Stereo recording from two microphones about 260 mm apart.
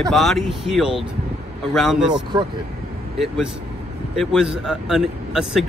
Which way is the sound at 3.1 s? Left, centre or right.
Centre.